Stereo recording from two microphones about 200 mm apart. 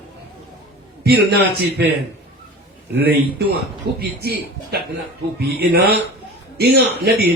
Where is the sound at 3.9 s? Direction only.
55° right (ahead or behind).